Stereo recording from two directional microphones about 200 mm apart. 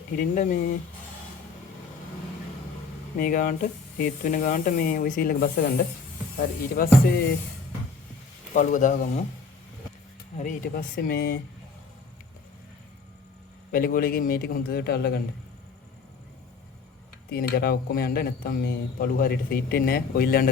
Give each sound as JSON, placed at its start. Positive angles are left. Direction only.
{"t": 0.2, "sound": "speech", "side_deg": 40}
{"t": 3.2, "sound": "speech", "side_deg": 45}
{"t": 8.5, "sound": "speech", "side_deg": 40}
{"t": 10.3, "sound": "speech", "side_deg": 40}
{"t": 13.7, "sound": "speech", "side_deg": 45}
{"t": 17.2, "sound": "speech", "side_deg": 50}